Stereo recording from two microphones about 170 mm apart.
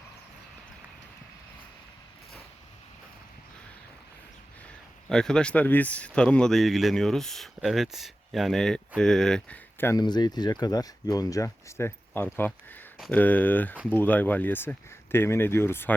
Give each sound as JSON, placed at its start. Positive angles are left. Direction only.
{"t": 5.0, "sound": "speech", "side_deg": 5}
{"t": 10.0, "sound": "speech", "side_deg": 25}